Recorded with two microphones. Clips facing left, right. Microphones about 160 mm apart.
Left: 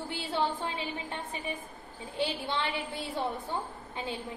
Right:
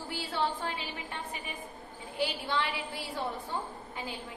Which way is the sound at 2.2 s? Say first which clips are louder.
Even; 25° left (ahead or behind).